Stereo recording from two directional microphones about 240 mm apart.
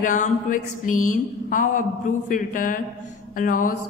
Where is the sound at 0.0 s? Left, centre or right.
Left.